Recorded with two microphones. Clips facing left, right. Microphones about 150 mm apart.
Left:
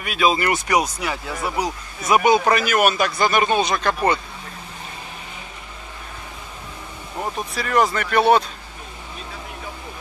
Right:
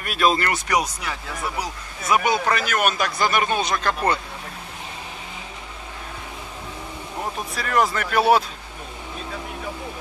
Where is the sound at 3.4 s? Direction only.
25° left (ahead or behind).